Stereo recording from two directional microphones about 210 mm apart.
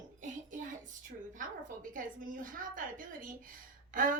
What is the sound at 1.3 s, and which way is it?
A woman's voice, 40° right (ahead or behind).